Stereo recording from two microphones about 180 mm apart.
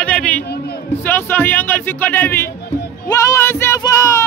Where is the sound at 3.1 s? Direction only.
15° left (ahead or behind).